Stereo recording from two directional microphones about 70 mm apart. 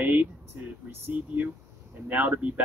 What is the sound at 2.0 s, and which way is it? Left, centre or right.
Speech, right.